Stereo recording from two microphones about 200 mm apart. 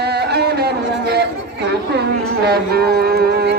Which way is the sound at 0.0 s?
55° right (ahead or behind).